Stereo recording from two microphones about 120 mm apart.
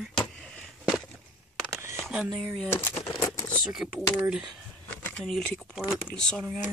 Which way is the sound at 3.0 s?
30° left (ahead or behind).